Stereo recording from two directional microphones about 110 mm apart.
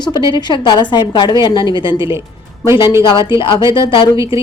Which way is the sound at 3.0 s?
45° left (ahead or behind).